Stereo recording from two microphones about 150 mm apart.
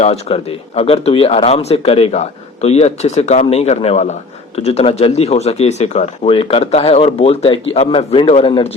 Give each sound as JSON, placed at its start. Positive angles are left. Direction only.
{"t": 0.0, "sound": "speech", "side_deg": 40}